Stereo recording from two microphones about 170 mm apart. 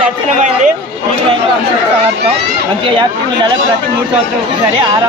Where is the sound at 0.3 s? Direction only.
45° right (ahead or behind).